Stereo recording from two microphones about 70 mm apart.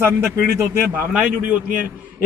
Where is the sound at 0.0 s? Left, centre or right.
Right.